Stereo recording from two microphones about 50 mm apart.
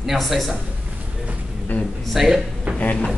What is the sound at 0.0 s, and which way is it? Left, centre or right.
Speech, centre.